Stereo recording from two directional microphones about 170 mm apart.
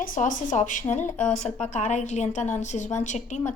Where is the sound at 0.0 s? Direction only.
50° left (ahead or behind).